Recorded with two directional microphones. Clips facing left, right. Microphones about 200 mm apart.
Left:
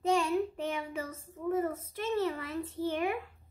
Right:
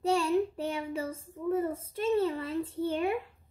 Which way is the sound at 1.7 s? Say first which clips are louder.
Right 5 dB; 30° right (ahead or behind).